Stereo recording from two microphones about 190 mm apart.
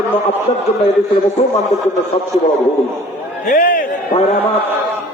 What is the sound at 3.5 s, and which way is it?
Speech, 45° left (ahead or behind).